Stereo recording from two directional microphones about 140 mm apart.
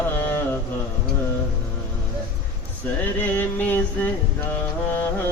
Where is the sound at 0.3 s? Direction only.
15° left (ahead or behind).